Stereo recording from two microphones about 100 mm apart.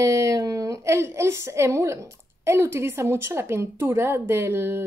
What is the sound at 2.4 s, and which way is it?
A woman's voice, 25° right (ahead or behind).